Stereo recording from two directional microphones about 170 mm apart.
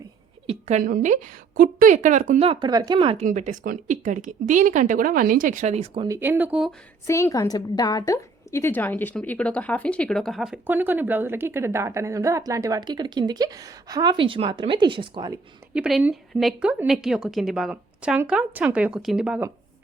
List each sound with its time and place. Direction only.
0.8 s speech: 55° right (ahead or behind)
2.5 s speech: 25° right (ahead or behind)
3.2 s speech: 45° right (ahead or behind)
6.1 s a woman's voice: 10° right (ahead or behind)
7.1 s a woman's voice: 15° left (ahead or behind); by 15.4 s 25° right (ahead or behind)
15.7 s a woman's voice: 5° right (ahead or behind)